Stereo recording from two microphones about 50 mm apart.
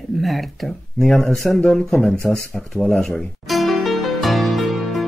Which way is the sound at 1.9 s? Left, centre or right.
Centre.